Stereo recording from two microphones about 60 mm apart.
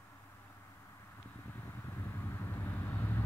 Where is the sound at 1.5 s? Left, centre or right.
Left.